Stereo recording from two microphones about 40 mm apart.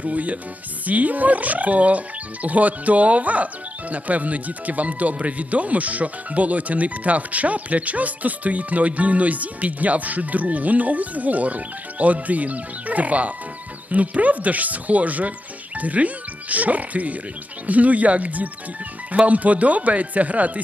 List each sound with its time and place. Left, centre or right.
0.0 s speech: right